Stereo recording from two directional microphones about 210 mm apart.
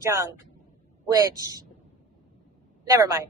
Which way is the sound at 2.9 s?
15° right (ahead or behind).